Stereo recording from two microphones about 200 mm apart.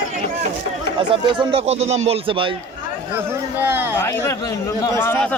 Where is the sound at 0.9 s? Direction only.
25° right (ahead or behind).